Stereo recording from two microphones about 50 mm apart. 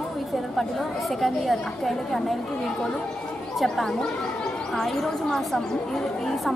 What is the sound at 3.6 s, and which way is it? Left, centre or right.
A woman's voice, centre.